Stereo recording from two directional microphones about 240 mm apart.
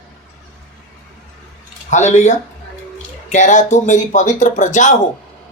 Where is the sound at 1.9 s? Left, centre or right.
Left.